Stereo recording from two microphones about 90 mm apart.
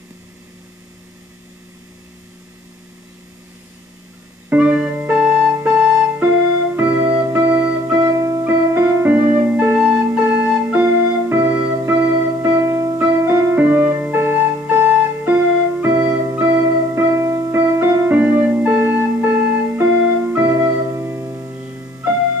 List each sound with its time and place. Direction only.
4.5 s music: 20° right (ahead or behind)
7.2 s music: 35° right (ahead or behind)
7.5 s music: 20° right (ahead or behind)
7.9 s music: 35° right (ahead or behind)